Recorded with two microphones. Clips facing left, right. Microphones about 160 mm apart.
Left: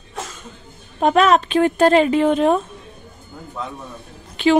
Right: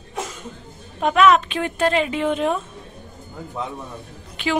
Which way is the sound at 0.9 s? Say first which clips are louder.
Left 1 dB; 35° left (ahead or behind).